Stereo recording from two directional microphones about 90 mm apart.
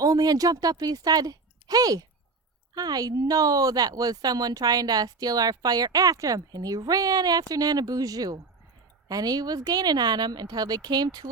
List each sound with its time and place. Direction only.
0.0 s a woman's voice: 45° right (ahead or behind)